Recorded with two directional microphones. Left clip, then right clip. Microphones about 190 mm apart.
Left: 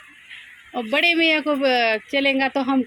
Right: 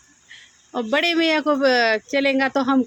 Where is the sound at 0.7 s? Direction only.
20° right (ahead or behind).